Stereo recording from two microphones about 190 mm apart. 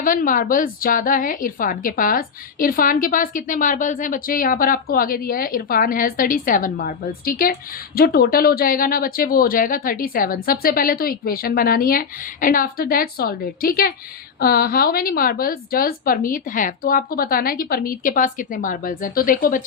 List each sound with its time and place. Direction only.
0.0 s a woman's voice: 45° left (ahead or behind)